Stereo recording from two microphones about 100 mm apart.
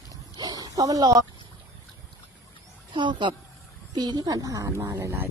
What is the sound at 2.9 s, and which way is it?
Speech, 50° right (ahead or behind).